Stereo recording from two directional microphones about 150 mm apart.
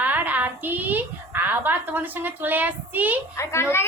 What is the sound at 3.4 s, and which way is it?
Speech, 20° left (ahead or behind).